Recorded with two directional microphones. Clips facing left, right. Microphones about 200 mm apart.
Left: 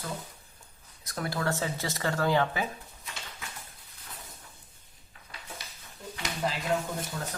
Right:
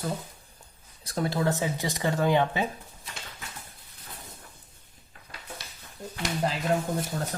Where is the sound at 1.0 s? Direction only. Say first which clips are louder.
Right 5 dB; 30° right (ahead or behind).